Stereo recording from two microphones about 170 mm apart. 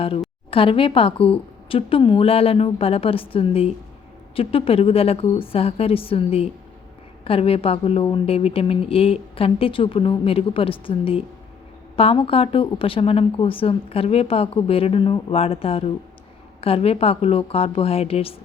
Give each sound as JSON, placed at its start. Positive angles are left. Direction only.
{"t": 0.5, "sound": "speech", "side_deg": 30}